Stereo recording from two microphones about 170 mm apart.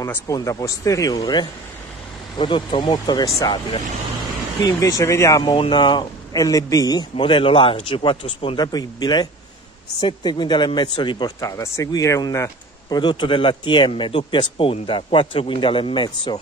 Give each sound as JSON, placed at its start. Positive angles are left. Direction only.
{"t": 0.0, "sound": "speech", "side_deg": 20}
{"t": 4.7, "sound": "speech", "side_deg": 15}
{"t": 5.4, "sound": "speech", "side_deg": 30}
{"t": 12.9, "sound": "speech", "side_deg": 30}